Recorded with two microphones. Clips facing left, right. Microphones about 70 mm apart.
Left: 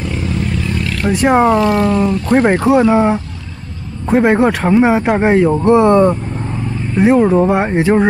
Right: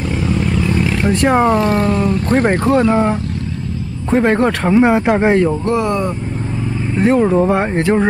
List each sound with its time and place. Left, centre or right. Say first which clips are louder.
0.7 s roaring cats: even; centre
1.1 s speech: left 3 dB; centre
1.6 s speech: left 2 dB; right
2.6 s speech: left 2 dB; centre
5.6 s speech: left 7 dB; left
7.0 s speech: left 2 dB; centre